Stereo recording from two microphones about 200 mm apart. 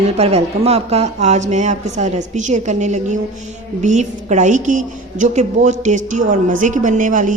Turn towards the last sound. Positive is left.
turn(degrees=-40)  # may be behind; listen again after turning